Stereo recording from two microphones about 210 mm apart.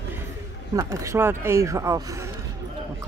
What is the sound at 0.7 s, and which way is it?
Speech, 15° right (ahead or behind).